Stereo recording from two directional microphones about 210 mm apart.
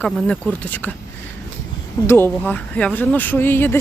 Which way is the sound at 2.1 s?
10° left (ahead or behind).